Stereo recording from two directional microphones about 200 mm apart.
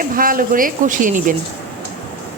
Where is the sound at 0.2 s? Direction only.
45° right (ahead or behind).